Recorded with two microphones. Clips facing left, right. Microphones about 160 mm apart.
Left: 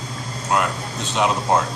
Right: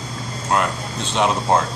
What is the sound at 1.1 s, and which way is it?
Speech, 5° left (ahead or behind).